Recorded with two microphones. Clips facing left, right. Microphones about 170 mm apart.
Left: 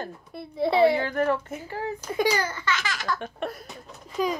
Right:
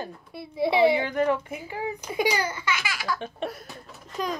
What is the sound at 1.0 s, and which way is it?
Speech, 15° right (ahead or behind).